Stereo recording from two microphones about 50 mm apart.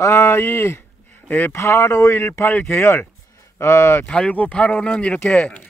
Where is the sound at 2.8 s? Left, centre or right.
Left.